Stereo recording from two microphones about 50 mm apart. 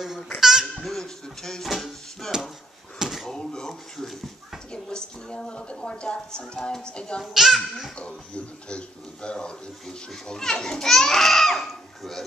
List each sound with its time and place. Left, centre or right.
0.4 s babbling: centre
0.7 s music: centre
3.0 s a sound: centre
3.3 s a sound: centre
7.3 s speech: centre
8.6 s a child's voice: centre